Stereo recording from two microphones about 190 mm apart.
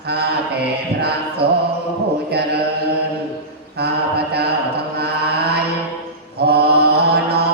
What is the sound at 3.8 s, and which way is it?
Mantra, 60° right (ahead or behind).